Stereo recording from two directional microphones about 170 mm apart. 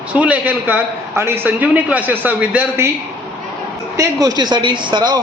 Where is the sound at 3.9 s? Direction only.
20° right (ahead or behind).